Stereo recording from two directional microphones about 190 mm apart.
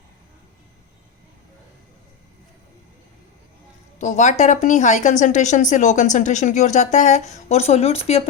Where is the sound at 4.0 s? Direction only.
40° left (ahead or behind).